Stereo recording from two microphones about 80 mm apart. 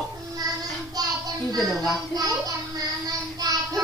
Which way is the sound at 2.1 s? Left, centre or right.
Right.